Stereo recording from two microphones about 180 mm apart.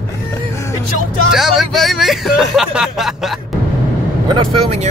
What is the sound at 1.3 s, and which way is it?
Speech, centre (ahead or behind).